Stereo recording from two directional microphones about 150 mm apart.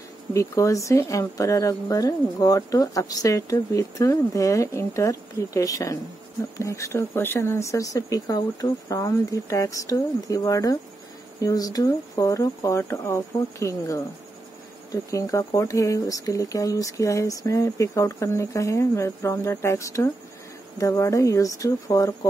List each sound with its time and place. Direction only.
0.3 s speech: 20° left (ahead or behind)